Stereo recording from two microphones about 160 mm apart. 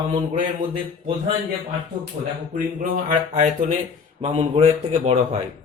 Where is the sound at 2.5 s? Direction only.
55° right (ahead or behind).